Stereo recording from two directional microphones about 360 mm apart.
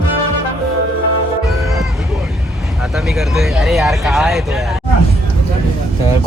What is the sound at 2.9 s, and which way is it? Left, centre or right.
Speech, centre.